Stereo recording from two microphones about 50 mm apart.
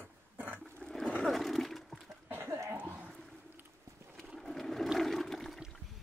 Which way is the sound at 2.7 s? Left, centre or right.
Right.